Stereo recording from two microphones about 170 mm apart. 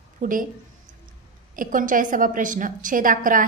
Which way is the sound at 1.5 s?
50° right (ahead or behind).